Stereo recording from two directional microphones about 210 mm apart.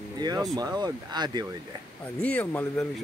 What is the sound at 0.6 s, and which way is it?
Speech, 20° right (ahead or behind).